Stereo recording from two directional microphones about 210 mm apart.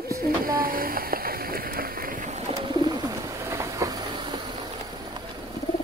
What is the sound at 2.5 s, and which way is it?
Bird, 20° right (ahead or behind).